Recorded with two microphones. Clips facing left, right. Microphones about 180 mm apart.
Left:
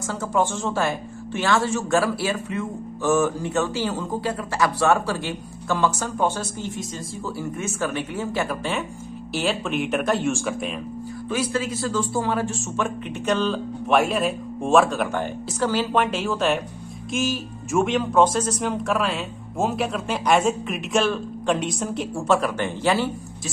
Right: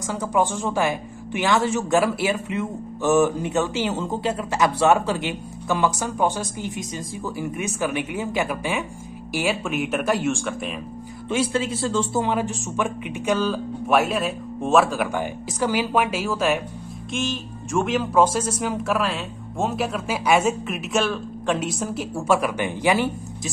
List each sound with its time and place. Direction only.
0.0 s speech: 15° right (ahead or behind)
11.2 s speech: 25° right (ahead or behind); by 16.6 s 5° right (ahead or behind)
17.1 s speech: 5° left (ahead or behind); by 23.5 s 15° right (ahead or behind)